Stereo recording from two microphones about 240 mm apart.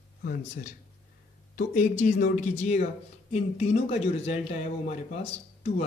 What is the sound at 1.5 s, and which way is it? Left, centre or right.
Speech, left.